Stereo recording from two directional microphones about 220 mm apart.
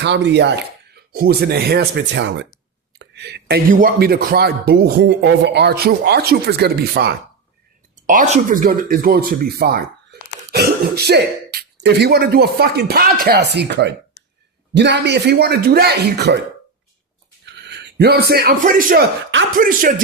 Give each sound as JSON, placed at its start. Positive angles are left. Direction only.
{"t": 0.0, "sound": "speech", "side_deg": -50}
{"t": 8.0, "sound": "speech", "side_deg": -35}
{"t": 17.4, "sound": "a man's voice", "side_deg": -50}